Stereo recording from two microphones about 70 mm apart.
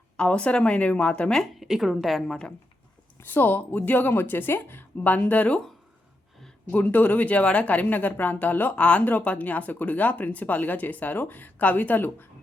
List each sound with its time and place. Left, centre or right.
0.2 s a woman's voice: centre
1.4 s a woman's voice: centre
3.2 s speech: left
6.7 s speech: left